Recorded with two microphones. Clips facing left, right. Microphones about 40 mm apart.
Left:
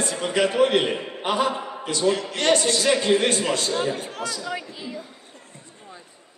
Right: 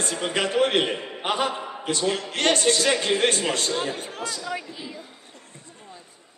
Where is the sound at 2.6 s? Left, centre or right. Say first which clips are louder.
Right 1 dB; right.